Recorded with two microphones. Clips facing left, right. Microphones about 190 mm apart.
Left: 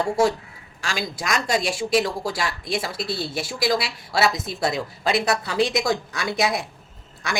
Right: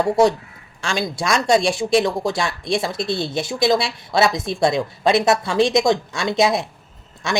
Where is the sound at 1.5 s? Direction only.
25° right (ahead or behind).